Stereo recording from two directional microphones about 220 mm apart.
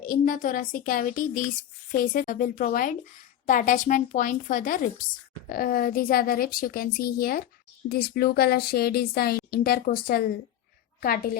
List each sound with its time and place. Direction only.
0.0 s a woman's voice: 40° left (ahead or behind)